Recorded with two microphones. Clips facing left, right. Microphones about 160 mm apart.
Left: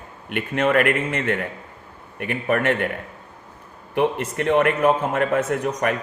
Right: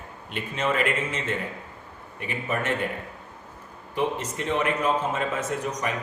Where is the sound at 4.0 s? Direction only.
60° left (ahead or behind).